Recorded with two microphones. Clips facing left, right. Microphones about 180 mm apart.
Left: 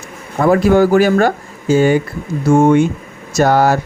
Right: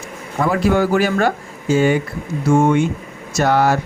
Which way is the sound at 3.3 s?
40° left (ahead or behind).